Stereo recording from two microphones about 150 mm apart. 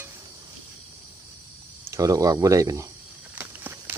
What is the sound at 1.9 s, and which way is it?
Speech, 20° right (ahead or behind).